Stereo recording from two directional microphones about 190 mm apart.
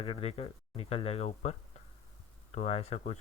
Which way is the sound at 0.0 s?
30° left (ahead or behind).